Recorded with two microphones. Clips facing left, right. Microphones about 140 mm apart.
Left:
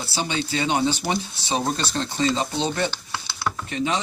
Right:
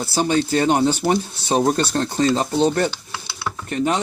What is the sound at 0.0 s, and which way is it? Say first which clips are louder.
Speech: right 8 dB; 45° right (ahead or behind).